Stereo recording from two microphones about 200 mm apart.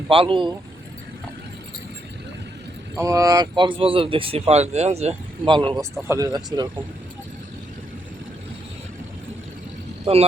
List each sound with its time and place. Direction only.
0.1 s speech: 25° right (ahead or behind)
3.0 s speech: 15° right (ahead or behind)
6.0 s speech: 15° right (ahead or behind)